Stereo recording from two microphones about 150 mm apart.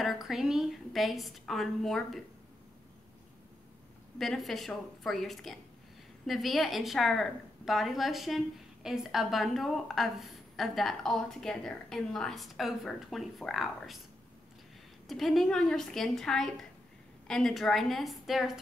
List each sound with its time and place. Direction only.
0.0 s a woman's voice: centre (ahead or behind)
4.2 s a woman's voice: centre (ahead or behind)
15.0 s a woman's voice: centre (ahead or behind)